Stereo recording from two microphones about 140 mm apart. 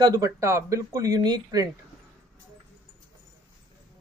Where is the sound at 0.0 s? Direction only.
25° right (ahead or behind).